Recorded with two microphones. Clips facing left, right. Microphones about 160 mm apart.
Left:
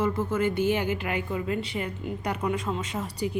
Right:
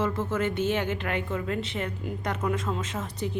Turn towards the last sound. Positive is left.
turn(degrees=5)  # may be behind; listen again after turning